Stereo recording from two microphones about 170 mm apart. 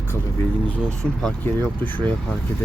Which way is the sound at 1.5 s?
10° left (ahead or behind).